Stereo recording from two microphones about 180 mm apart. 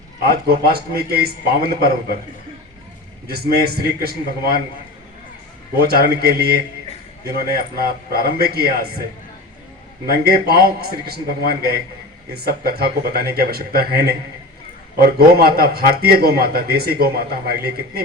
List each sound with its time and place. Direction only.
0.3 s a man's voice: 60° right (ahead or behind)
3.2 s a man's voice: 60° right (ahead or behind)
5.8 s a man's voice: 60° right (ahead or behind)
10.1 s a man's voice: 60° right (ahead or behind)